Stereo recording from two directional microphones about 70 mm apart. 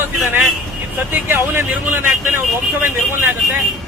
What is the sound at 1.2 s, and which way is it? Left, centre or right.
Speech, right.